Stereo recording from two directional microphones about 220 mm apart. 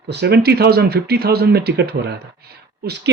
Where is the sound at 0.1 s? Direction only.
50° right (ahead or behind).